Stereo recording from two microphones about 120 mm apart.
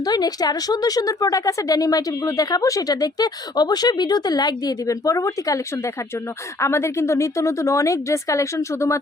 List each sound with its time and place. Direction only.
0.0 s speech: 35° left (ahead or behind)